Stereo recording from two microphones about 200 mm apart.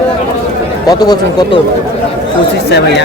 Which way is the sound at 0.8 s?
20° left (ahead or behind).